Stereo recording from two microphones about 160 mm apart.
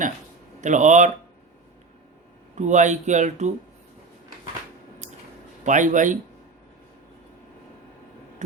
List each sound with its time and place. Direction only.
0.6 s speech: 50° right (ahead or behind)
2.6 s speech: 50° right (ahead or behind)
5.6 s speech: 50° right (ahead or behind)
8.4 s heart sounds: 45° right (ahead or behind)